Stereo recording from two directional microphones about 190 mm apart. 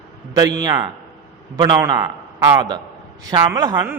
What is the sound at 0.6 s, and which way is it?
A man's voice, 20° right (ahead or behind).